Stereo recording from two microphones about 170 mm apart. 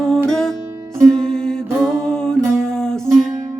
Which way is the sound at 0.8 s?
15° right (ahead or behind).